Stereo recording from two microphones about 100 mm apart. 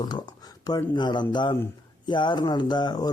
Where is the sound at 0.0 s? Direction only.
45° left (ahead or behind).